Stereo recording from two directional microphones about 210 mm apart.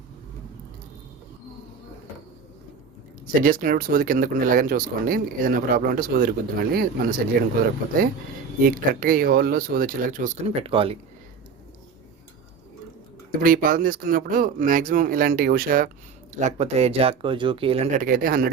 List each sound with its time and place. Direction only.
3.2 s speech: 40° right (ahead or behind)
8.6 s speech: 40° right (ahead or behind); by 10.9 s 25° right (ahead or behind)
13.4 s speech: 40° right (ahead or behind)